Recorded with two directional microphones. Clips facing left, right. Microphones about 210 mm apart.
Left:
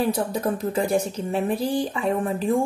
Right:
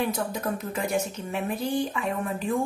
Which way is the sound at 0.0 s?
35° left (ahead or behind).